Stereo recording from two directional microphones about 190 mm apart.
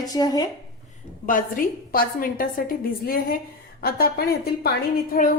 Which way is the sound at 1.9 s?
50° left (ahead or behind).